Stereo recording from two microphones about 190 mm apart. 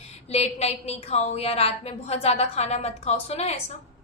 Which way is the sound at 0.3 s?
35° left (ahead or behind).